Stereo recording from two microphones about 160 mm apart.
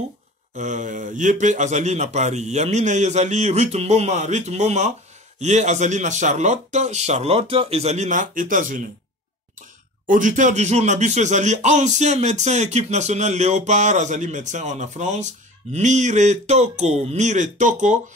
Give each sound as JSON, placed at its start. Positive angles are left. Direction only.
{"t": 0.6, "sound": "speech", "side_deg": -50}